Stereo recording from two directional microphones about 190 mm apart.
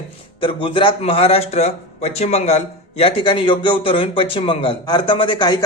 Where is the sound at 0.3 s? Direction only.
25° left (ahead or behind).